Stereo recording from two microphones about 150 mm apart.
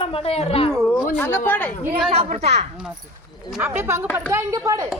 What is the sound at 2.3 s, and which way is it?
Speech, 45° right (ahead or behind).